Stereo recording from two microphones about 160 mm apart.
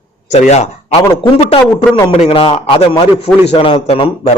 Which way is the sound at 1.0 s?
30° left (ahead or behind).